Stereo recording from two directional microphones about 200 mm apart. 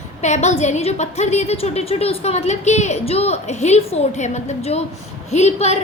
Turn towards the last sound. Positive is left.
turn(degrees=35)  # may be behind; listen again after turning